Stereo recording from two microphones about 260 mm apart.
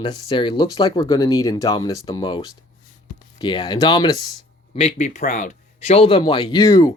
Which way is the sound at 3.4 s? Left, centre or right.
Centre.